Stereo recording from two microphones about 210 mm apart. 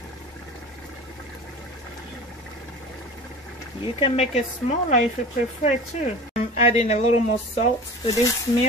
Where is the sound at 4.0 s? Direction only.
30° left (ahead or behind).